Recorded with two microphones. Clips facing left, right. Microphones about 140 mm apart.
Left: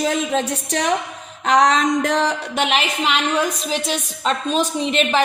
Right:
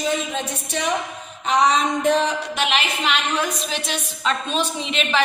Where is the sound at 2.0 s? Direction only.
85° left.